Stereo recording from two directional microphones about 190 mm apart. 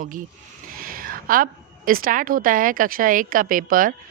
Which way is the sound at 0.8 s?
50° right (ahead or behind).